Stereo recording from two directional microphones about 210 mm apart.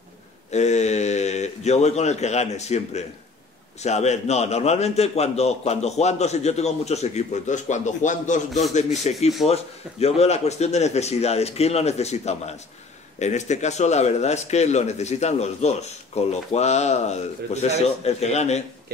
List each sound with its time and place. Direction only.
0.5 s speech: 35° left (ahead or behind)